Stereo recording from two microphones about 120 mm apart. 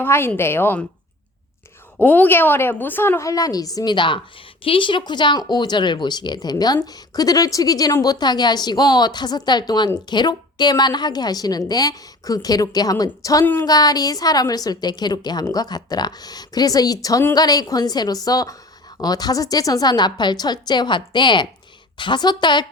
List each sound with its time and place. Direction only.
0.0 s a woman's voice: 20° left (ahead or behind)
2.0 s a woman's voice: 15° left (ahead or behind)
13.4 s a woman's voice: 15° left (ahead or behind)
13.7 s a woman's voice: 35° left (ahead or behind)